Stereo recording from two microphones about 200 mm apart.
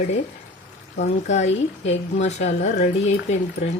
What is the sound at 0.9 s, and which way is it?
A woman's voice, 35° left (ahead or behind).